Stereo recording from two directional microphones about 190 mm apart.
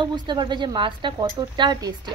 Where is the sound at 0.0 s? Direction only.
25° right (ahead or behind).